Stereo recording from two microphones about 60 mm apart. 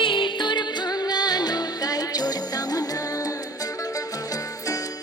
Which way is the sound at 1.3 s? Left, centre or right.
Left.